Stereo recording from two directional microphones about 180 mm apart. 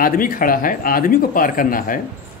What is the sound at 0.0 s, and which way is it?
Speech, 50° left (ahead or behind).